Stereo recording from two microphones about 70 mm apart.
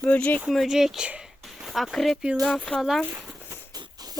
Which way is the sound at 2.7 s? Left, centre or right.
Centre.